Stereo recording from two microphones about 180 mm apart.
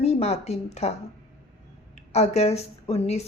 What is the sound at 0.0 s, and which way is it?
Speech, 35° left (ahead or behind).